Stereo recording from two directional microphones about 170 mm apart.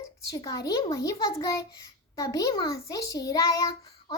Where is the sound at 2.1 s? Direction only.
20° left (ahead or behind).